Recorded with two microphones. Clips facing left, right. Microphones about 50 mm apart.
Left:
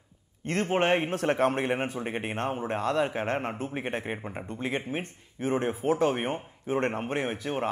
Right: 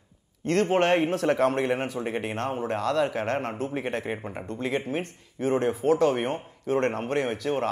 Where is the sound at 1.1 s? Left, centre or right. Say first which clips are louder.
Right 2 dB; left.